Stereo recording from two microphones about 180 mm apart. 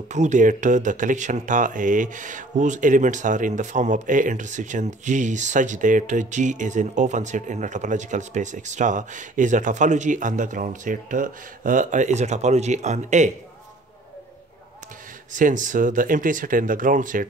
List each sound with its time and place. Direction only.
0.1 s speech: 40° right (ahead or behind)
15.3 s speech: 45° right (ahead or behind)